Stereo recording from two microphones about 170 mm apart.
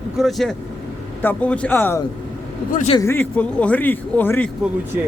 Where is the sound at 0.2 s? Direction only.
Centre (ahead or behind).